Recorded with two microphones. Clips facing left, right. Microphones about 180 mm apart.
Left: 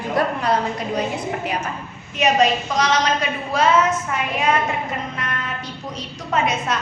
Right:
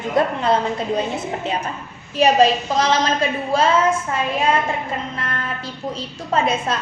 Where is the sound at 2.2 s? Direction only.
30° right (ahead or behind).